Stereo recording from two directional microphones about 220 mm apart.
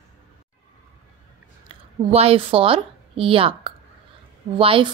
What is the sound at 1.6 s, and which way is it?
A woman's voice, 25° right (ahead or behind).